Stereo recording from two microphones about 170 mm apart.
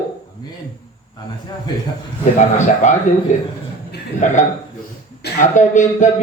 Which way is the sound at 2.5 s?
45° left (ahead or behind).